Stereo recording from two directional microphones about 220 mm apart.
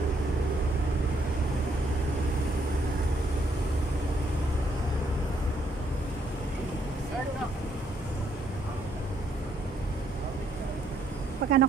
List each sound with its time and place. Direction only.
11.4 s vehicle: 45° right (ahead or behind)